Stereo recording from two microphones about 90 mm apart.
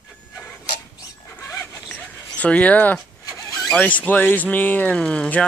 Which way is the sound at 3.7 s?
15° left (ahead or behind).